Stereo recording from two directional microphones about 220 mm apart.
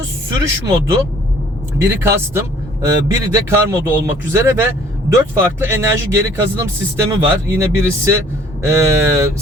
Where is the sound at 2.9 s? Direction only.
15° right (ahead or behind).